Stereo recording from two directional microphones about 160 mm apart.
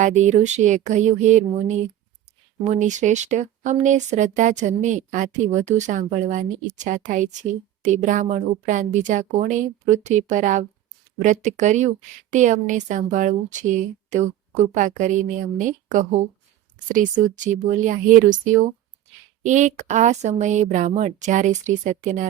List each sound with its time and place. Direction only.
0.0 s speech: 45° right (ahead or behind)